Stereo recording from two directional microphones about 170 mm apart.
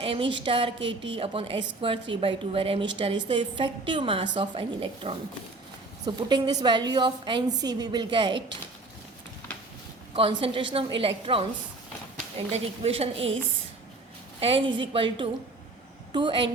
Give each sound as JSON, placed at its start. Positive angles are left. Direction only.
{"t": 0.0, "sound": "a woman's voice", "side_deg": -30}
{"t": 10.2, "sound": "a woman's voice", "side_deg": -30}
{"t": 12.5, "sound": "a woman's voice", "side_deg": -40}
{"t": 14.3, "sound": "a woman's voice", "side_deg": -30}